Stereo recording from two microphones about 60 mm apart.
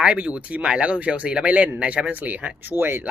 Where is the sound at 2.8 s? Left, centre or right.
Right.